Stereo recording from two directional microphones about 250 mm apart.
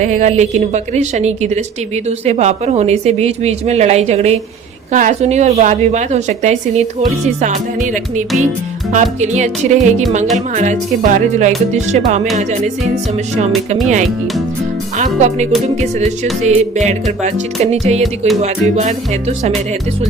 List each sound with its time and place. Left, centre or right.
0.0 s a woman's voice: right
8.9 s a woman's voice: right
14.9 s a woman's voice: right